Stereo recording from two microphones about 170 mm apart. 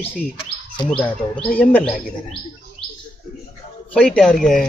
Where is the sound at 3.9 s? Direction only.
5° left (ahead or behind).